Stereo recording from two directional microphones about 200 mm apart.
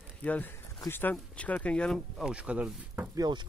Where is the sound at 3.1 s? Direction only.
20° right (ahead or behind).